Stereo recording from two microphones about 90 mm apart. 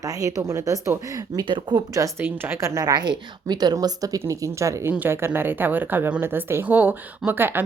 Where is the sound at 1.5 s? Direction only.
60° right (ahead or behind).